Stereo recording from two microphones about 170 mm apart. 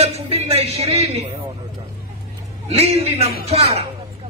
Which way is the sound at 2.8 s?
40° right (ahead or behind).